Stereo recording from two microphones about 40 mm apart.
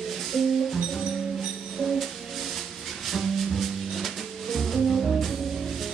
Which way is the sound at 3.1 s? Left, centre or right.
Centre.